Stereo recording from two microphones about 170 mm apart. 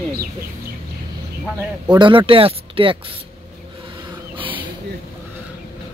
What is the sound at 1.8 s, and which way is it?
Speech, 25° right (ahead or behind).